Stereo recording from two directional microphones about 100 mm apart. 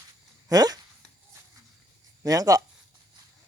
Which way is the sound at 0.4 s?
40° right (ahead or behind).